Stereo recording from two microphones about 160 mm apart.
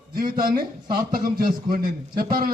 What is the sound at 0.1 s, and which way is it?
A man's voice, 65° right (ahead or behind).